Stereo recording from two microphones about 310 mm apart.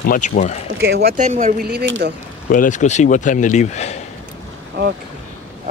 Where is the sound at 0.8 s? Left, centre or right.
Right.